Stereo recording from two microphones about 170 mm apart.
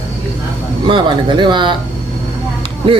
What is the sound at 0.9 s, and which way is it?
Speech, 30° right (ahead or behind).